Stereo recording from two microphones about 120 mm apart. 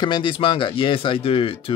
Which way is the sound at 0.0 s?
40° left (ahead or behind).